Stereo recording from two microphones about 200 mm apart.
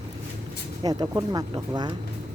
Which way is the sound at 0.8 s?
20° right (ahead or behind).